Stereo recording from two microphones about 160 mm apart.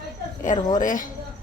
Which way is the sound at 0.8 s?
55° left (ahead or behind).